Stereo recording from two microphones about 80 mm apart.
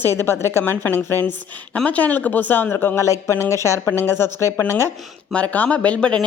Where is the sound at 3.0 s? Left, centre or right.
Left.